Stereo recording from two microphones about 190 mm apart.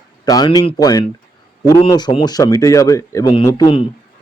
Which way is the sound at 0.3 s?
20° left (ahead or behind).